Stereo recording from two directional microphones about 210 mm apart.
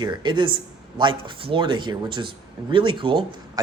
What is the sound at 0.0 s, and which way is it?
A man's voice, 20° right (ahead or behind).